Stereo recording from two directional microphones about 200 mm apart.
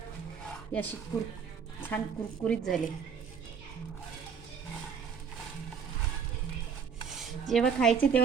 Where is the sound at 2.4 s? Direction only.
5° left (ahead or behind).